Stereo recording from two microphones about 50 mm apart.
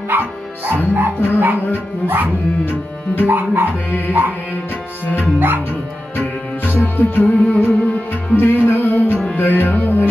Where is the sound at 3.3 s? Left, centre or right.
Right.